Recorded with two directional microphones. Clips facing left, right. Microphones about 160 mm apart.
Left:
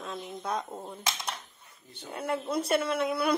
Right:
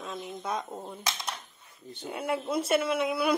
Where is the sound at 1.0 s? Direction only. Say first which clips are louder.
Left 1 dB; 25° left (ahead or behind).